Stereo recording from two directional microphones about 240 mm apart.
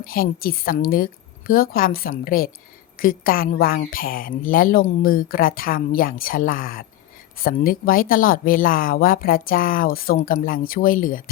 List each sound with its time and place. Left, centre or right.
0.0 s speech: left